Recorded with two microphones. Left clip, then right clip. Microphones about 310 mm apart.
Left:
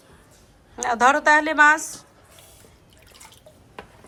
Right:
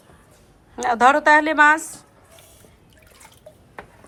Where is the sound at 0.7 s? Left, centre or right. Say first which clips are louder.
Right 2 dB; centre.